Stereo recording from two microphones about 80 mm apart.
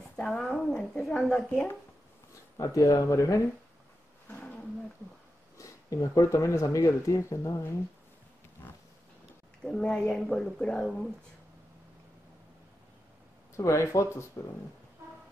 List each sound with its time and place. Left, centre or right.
0.1 s speech: centre
2.5 s speech: left
4.3 s roaring cats: centre
5.6 s speech: left
9.7 s speech: centre
13.6 s speech: left